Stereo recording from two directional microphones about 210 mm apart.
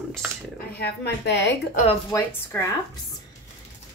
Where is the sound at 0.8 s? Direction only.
50° left (ahead or behind).